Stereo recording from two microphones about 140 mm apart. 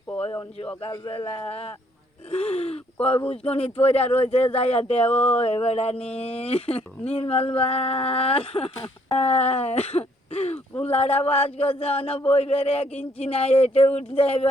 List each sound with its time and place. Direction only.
0.8 s a man's voice: 35° left (ahead or behind)
1.5 s speech: 45° left (ahead or behind)